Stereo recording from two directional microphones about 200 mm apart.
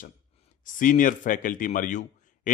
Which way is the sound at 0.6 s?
40° left (ahead or behind).